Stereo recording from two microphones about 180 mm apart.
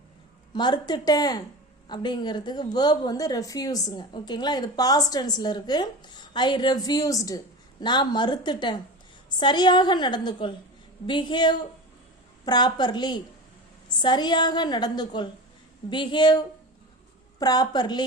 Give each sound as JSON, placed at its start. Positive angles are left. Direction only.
{"t": 0.5, "sound": "a woman's voice", "side_deg": 25}
{"t": 17.4, "sound": "a woman's voice", "side_deg": 20}